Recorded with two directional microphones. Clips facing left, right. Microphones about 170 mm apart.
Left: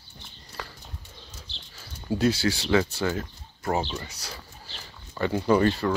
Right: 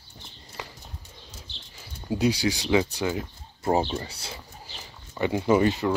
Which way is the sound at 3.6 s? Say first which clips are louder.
Right 4 dB; 30° right (ahead or behind).